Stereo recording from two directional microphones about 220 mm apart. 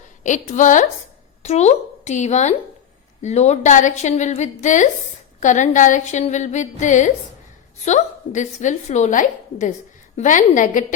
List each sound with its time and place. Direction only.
0.2 s a woman's voice: 35° left (ahead or behind)